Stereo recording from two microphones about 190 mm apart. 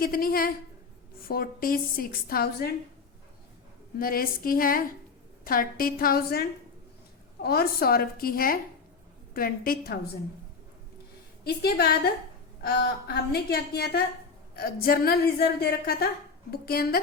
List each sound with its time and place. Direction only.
0.0 s a woman's voice: 50° left (ahead or behind)
3.9 s a woman's voice: 50° left (ahead or behind)
11.4 s a woman's voice: 55° left (ahead or behind)